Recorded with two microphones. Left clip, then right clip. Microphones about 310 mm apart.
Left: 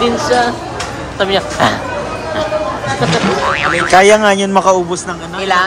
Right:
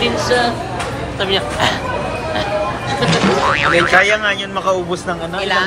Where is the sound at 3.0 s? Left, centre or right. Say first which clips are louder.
Even; centre.